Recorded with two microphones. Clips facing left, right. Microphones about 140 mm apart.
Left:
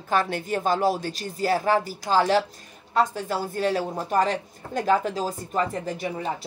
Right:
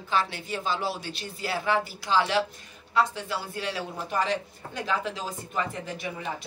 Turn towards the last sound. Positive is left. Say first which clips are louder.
# left 5 dB
turn(degrees=35)  # may be behind; listen again after turning